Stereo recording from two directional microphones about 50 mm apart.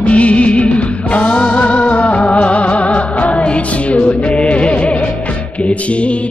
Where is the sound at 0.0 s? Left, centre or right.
Left.